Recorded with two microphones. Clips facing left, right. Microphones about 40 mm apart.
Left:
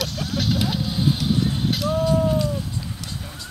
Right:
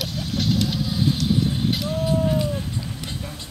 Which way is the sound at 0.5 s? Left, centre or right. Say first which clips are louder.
Even; centre.